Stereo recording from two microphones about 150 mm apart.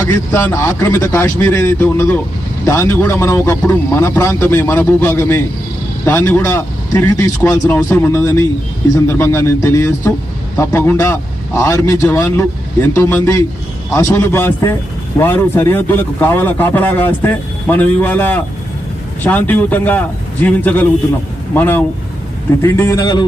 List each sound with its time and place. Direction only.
0.1 s a man's voice: 20° left (ahead or behind)